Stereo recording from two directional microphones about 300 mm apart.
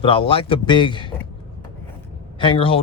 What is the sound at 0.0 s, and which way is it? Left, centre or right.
Speech, centre.